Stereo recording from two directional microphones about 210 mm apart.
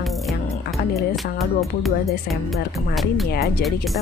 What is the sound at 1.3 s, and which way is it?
Speech, centre (ahead or behind).